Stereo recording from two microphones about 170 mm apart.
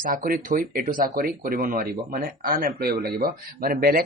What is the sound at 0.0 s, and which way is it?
A man's voice, 55° right (ahead or behind).